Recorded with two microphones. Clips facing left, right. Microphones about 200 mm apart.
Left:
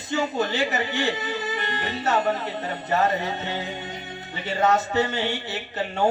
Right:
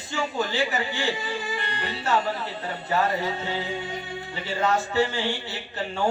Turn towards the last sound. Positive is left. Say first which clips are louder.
# left 3 dB
turn(degrees=20)  # may be behind; listen again after turning